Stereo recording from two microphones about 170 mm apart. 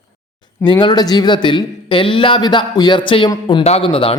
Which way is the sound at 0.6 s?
25° left (ahead or behind).